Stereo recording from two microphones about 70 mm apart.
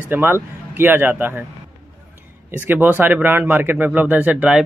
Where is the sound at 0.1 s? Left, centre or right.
Right.